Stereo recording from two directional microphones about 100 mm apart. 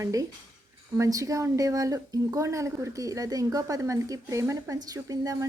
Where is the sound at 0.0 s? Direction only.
35° right (ahead or behind).